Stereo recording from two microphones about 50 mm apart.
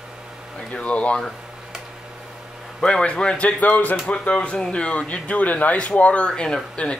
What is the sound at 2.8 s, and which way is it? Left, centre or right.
Speech, centre.